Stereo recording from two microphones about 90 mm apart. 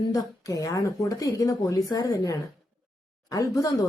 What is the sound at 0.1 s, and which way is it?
A woman's voice, 40° left (ahead or behind).